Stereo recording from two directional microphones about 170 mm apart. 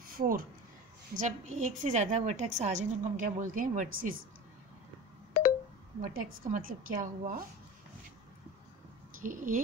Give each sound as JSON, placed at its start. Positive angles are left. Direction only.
{"t": 0.0, "sound": "a sound", "side_deg": -55}
{"t": 1.1, "sound": "a woman's voice", "side_deg": -45}
{"t": 5.9, "sound": "a woman's voice", "side_deg": -50}
{"t": 9.2, "sound": "a woman's voice", "side_deg": -50}